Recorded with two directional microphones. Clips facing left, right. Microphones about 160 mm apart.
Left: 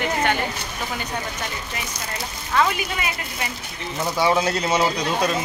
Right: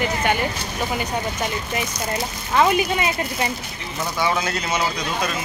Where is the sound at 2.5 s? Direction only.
25° right (ahead or behind).